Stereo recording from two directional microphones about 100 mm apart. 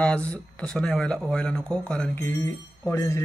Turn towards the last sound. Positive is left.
turn(degrees=25)  # may be behind; listen again after turning